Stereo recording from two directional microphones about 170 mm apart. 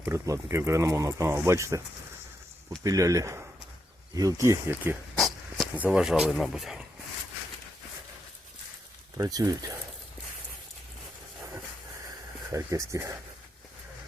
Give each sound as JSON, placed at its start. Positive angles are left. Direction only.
{"t": 0.0, "sound": "speech", "side_deg": -15}
{"t": 2.8, "sound": "speech", "side_deg": -20}
{"t": 5.1, "sound": "a sound", "side_deg": 0}
{"t": 5.7, "sound": "speech", "side_deg": -10}
{"t": 9.1, "sound": "speech", "side_deg": -20}
{"t": 12.5, "sound": "speech", "side_deg": -20}